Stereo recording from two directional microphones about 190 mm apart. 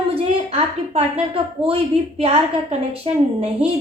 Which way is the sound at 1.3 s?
30° right (ahead or behind).